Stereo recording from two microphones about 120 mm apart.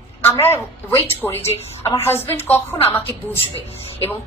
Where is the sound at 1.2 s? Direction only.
20° left (ahead or behind).